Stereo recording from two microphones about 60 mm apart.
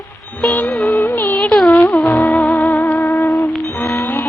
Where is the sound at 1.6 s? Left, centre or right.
Left.